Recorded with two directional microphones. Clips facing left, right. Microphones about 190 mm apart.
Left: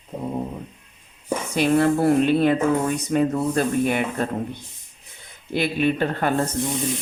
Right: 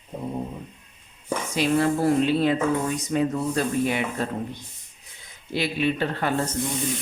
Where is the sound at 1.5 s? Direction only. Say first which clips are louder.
Left 3 dB; 55° left (ahead or behind).